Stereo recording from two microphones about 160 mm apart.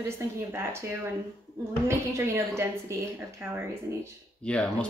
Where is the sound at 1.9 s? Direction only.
15° right (ahead or behind).